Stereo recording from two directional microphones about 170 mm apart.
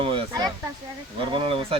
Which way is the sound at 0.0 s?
30° right (ahead or behind).